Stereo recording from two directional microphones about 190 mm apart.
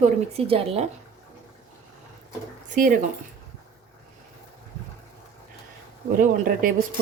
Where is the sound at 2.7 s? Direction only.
45° right (ahead or behind).